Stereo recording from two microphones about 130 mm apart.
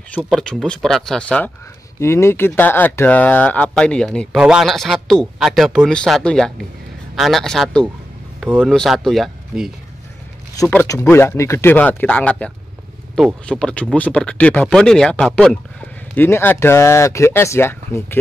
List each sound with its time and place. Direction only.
0.1 s speech: 5° left (ahead or behind)
2.0 s speech: 20° left (ahead or behind); by 9.7 s centre (ahead or behind)
10.7 s speech: 20° left (ahead or behind)